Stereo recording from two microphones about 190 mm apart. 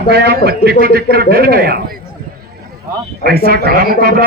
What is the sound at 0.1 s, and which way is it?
Speech, 60° right (ahead or behind).